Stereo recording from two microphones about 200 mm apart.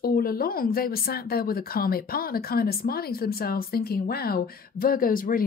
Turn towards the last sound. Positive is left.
turn(degrees=45)  # may be behind; listen again after turning